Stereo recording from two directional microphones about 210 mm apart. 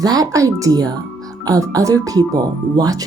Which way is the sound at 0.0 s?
15° right (ahead or behind).